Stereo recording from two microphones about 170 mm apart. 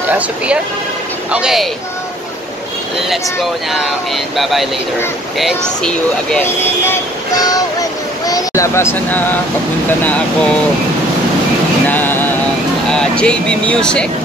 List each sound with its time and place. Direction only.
1.3 s speech: 5° right (ahead or behind)
4.4 s speech: centre (ahead or behind)
11.9 s a sound: 10° left (ahead or behind)
12.9 s speech: 5° left (ahead or behind)